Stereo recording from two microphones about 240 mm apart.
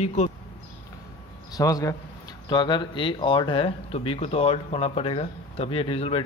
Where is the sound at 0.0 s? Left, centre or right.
Left.